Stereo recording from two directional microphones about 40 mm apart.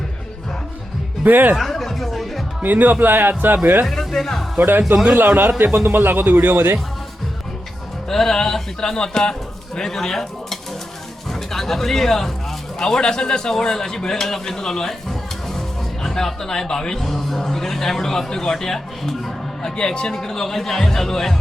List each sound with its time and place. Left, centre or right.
1.2 s speech: right
1.5 s music: centre
2.6 s speech: right
3.8 s speech: centre
5.1 s a man's voice: right
8.1 s speech: centre
9.0 s speech: left
16.0 s speech: centre
19.7 s speech: left